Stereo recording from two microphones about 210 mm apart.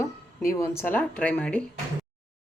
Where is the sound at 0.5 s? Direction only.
10° left (ahead or behind).